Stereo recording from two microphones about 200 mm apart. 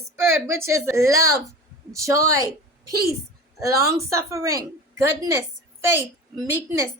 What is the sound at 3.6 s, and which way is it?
A woman's voice, 15° right (ahead or behind).